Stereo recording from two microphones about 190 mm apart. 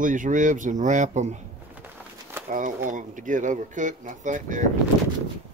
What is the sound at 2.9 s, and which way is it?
Speech, 40° right (ahead or behind).